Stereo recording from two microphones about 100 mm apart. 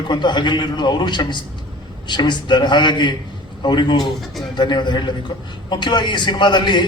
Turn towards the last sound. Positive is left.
turn(degrees=50)  # may be behind; listen again after turning